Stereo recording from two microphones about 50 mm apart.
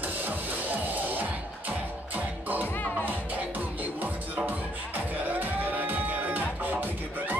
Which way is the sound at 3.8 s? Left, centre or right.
Right.